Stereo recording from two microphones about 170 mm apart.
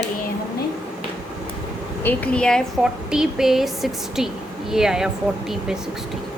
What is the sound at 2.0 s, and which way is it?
A woman's voice, 5° left (ahead or behind).